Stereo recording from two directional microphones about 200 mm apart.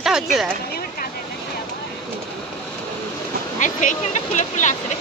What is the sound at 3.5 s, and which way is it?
Speech, 40° left (ahead or behind).